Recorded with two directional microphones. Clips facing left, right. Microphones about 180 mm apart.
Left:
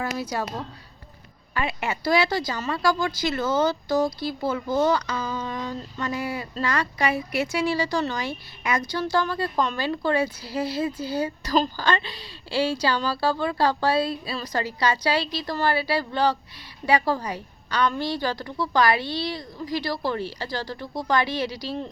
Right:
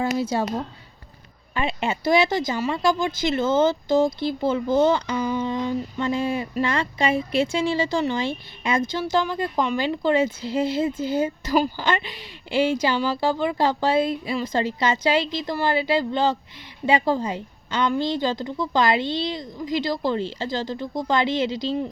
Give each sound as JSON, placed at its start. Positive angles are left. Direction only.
{"t": 0.0, "sound": "a woman's voice", "side_deg": -25}
{"t": 1.5, "sound": "a woman's voice", "side_deg": -25}
{"t": 9.0, "sound": "a woman's voice", "side_deg": -15}